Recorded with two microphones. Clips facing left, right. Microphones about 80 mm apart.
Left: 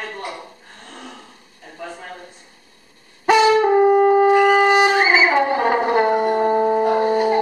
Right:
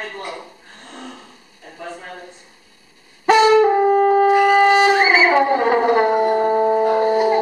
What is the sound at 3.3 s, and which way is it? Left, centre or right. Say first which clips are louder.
Brass instrument: right 2 dB; centre.